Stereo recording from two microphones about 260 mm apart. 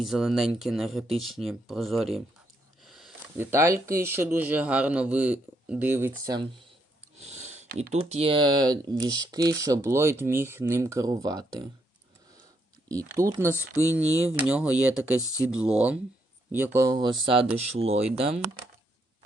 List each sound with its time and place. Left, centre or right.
0.0 s speech: centre
7.2 s speech: right
12.9 s speech: centre